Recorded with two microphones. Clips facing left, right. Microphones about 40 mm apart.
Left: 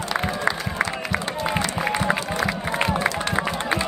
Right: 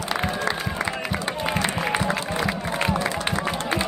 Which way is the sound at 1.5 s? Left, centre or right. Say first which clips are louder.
Even; centre.